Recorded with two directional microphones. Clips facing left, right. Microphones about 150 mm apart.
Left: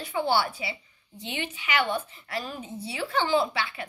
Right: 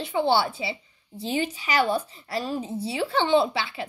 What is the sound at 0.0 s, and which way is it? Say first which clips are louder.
Speech: right 3 dB; 25° right (ahead or behind).